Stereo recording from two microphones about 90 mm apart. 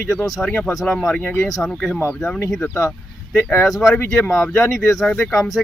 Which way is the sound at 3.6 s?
Centre (ahead or behind).